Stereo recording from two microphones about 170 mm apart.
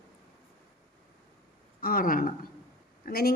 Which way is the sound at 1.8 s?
60° left (ahead or behind).